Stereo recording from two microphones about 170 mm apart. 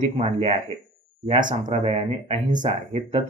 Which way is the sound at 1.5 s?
50° right (ahead or behind).